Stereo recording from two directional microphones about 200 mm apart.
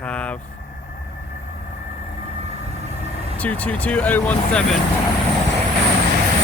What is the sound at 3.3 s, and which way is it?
Speech, 5° left (ahead or behind).